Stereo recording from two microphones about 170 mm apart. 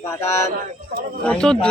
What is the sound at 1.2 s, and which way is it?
Speech, 5° left (ahead or behind).